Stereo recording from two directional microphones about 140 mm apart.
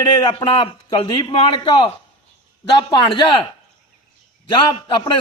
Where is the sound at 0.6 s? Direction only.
35° left (ahead or behind).